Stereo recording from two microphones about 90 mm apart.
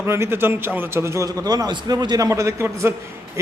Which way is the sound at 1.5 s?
45° right (ahead or behind).